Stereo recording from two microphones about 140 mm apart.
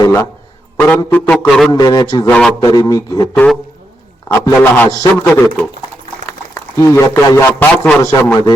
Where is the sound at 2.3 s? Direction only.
5° left (ahead or behind).